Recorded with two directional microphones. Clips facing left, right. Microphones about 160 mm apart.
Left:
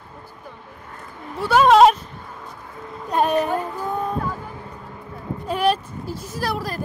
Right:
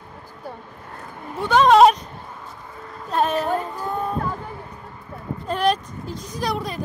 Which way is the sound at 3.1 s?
10° left (ahead or behind).